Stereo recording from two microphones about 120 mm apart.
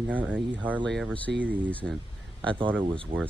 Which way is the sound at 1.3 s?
15° right (ahead or behind).